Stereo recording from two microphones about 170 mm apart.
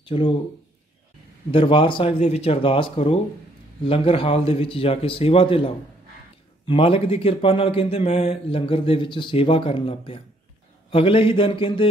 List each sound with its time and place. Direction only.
0.0 s speech: 30° left (ahead or behind)
1.5 s a man's voice: 30° left (ahead or behind)